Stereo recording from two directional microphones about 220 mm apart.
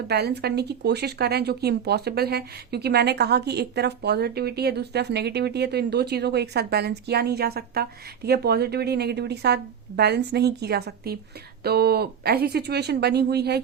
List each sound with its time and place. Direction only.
0.1 s speech: 45° right (ahead or behind)